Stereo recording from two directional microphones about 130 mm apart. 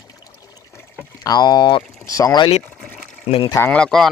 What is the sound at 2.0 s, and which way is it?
Speech, 25° left (ahead or behind).